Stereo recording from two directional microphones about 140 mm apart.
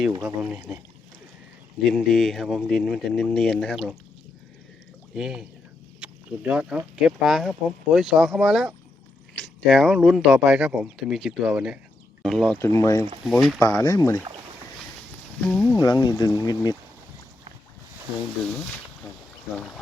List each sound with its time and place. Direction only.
0.1 s speech: 20° right (ahead or behind)
0.4 s speech: 5° right (ahead or behind)
1.8 s speech: centre (ahead or behind)
5.1 s speech: 5° right (ahead or behind)
12.5 s speech: 20° left (ahead or behind)
13.2 s speech: centre (ahead or behind)
13.6 s speech: 25° left (ahead or behind)
15.4 s speech: 10° left (ahead or behind)
15.8 s speech: 25° left (ahead or behind)